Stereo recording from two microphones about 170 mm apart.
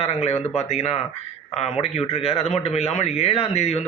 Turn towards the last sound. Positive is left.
turn(degrees=40)  # may be behind; listen again after turning